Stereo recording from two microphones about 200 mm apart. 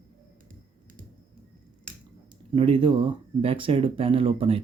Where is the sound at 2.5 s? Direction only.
25° right (ahead or behind).